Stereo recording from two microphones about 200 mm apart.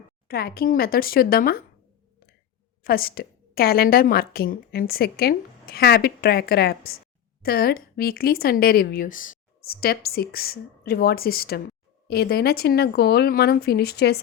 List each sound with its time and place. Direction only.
0.3 s a woman's voice: 50° left (ahead or behind)
2.8 s a woman's voice: 45° left (ahead or behind)